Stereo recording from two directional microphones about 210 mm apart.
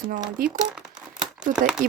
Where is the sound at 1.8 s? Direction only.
40° right (ahead or behind).